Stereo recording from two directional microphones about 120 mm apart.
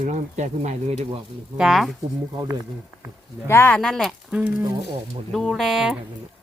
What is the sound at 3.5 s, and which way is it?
Speech, 20° left (ahead or behind).